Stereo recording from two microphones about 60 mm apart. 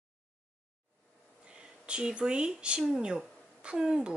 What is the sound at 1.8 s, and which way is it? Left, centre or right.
A woman's voice, centre.